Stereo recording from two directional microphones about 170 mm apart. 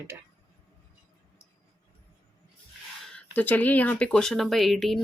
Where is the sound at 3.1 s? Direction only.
10° left (ahead or behind).